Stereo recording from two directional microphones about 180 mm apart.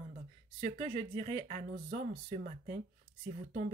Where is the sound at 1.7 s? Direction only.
50° right (ahead or behind).